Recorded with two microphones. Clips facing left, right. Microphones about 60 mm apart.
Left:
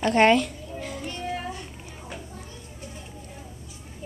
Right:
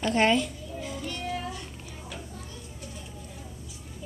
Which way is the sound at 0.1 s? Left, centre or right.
Left.